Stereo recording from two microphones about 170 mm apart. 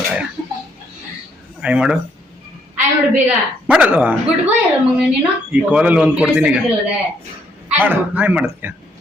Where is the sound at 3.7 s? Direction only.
10° right (ahead or behind).